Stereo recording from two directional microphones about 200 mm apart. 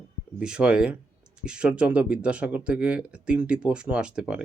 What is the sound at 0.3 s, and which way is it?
Speech, 5° right (ahead or behind).